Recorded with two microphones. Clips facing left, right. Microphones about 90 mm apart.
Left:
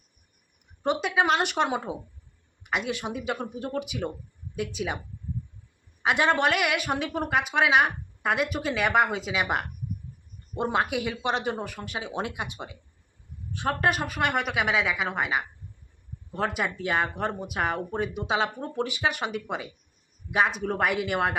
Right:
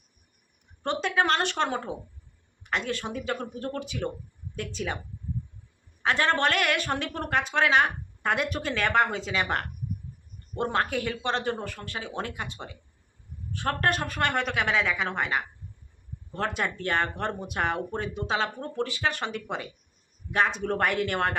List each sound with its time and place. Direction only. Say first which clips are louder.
0.8 s a woman's voice: left 1 dB; 10° left (ahead or behind)
6.0 s a woman's voice: left 1 dB; 10° left (ahead or behind)
13.8 s a woman's voice: left 1 dB; 5° left (ahead or behind)